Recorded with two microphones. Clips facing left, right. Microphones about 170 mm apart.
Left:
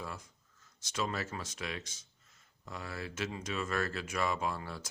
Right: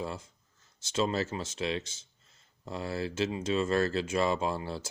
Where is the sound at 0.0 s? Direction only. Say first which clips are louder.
Right 7 dB; 25° right (ahead or behind).